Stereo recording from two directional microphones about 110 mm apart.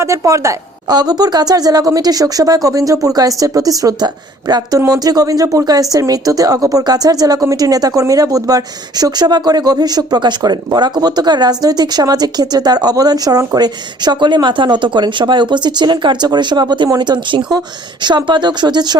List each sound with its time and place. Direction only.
0.0 s speech: 30° right (ahead or behind)